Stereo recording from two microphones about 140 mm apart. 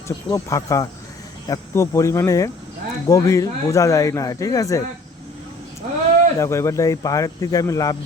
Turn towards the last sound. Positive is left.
turn(degrees=25)  # may be behind; listen again after turning